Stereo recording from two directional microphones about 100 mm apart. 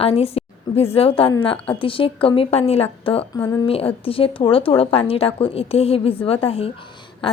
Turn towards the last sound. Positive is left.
turn(degrees=60)  # may be behind; listen again after turning